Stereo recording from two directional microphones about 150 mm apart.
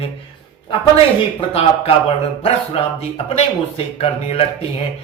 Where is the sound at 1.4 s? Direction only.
40° left (ahead or behind).